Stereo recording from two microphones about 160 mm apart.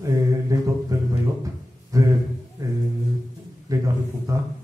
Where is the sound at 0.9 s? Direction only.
20° right (ahead or behind).